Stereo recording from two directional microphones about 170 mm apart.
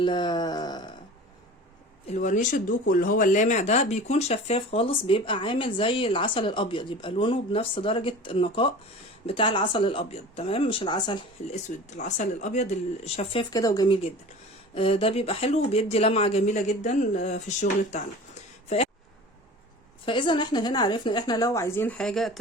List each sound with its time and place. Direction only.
0.0 s a sound: 25° left (ahead or behind)
2.0 s speech: 45° left (ahead or behind); by 11.2 s 25° left (ahead or behind)
11.5 s speech: 40° left (ahead or behind)
13.5 s a woman's voice: 20° left (ahead or behind); by 18.0 s 45° left (ahead or behind)
20.1 s a woman's voice: 30° left (ahead or behind); by 22.3 s 5° left (ahead or behind)